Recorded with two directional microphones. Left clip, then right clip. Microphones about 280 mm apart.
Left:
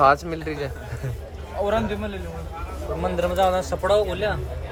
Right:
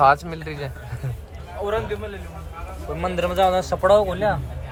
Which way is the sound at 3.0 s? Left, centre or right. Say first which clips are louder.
Right 1 dB; right.